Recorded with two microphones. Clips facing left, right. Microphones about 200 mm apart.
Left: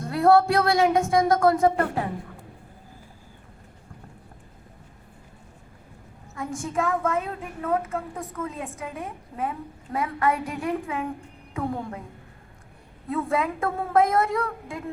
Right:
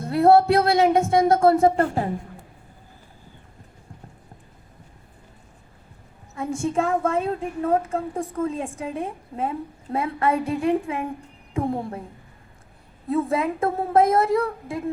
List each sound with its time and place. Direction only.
0.0 s a woman's voice: 25° right (ahead or behind)
6.6 s a woman's voice: 30° right (ahead or behind)
13.1 s a woman's voice: 25° right (ahead or behind)